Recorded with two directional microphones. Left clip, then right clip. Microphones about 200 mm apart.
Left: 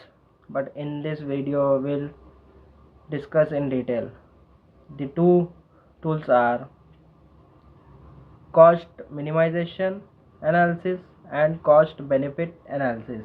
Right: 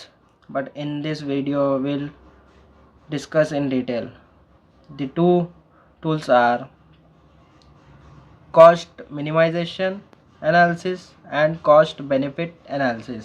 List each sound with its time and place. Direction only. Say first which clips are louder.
0.5 s speech: right 2 dB; 35° right (ahead or behind)
3.1 s speech: right 2 dB; 35° right (ahead or behind)
8.5 s speech: right 4 dB; 35° right (ahead or behind)